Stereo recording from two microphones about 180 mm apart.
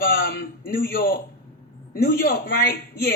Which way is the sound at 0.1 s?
60° left (ahead or behind).